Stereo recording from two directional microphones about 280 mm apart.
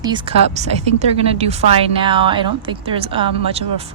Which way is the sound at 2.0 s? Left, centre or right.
Centre.